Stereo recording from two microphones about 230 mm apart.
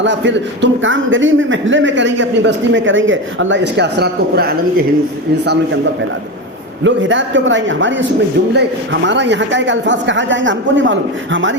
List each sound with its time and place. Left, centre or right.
0.0 s a man's voice: right
6.8 s a man's voice: right